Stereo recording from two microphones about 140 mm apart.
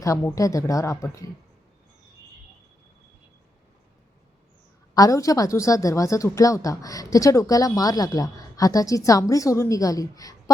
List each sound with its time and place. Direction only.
0.0 s speech: 20° left (ahead or behind)
4.9 s speech: 25° left (ahead or behind)